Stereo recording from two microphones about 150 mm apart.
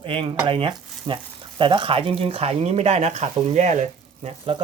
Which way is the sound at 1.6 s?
35° right (ahead or behind).